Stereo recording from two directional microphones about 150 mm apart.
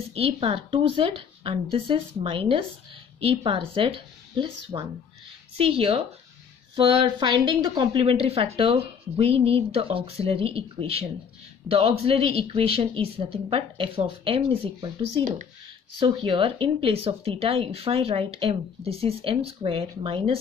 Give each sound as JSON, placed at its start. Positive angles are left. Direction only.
{"t": 0.1, "sound": "speech", "side_deg": -40}